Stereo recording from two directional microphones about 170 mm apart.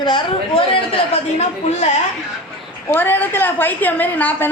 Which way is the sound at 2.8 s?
10° left (ahead or behind).